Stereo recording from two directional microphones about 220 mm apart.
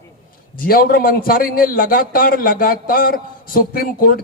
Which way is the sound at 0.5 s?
40° left (ahead or behind).